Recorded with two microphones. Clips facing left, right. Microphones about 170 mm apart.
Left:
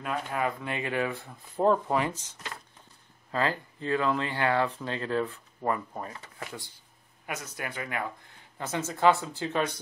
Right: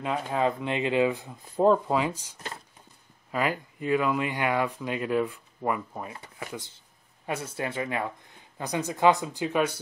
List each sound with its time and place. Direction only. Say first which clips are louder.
0.0 s speech: right 4 dB; 25° right (ahead or behind); by 6.1 s 10° right (ahead or behind)
6.4 s speech: right 3 dB; 20° right (ahead or behind)